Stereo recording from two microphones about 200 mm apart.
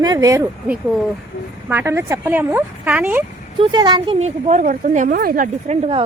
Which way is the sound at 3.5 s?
20° right (ahead or behind).